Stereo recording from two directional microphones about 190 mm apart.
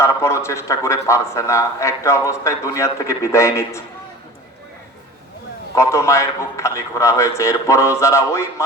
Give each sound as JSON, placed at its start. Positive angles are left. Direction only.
{"t": 0.0, "sound": "a man's voice", "side_deg": 15}
{"t": 5.7, "sound": "a man's voice", "side_deg": 15}